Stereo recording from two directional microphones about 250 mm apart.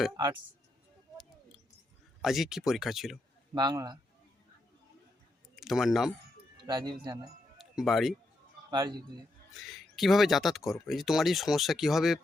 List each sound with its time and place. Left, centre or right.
1.1 s a sound: centre
2.2 s speech: centre
3.5 s speech: centre
5.5 s speech: centre
6.7 s speech: centre
7.6 s speech: centre
8.7 s a man's voice: centre
9.6 s speech: centre